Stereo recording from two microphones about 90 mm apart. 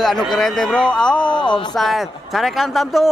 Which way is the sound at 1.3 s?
60° left (ahead or behind).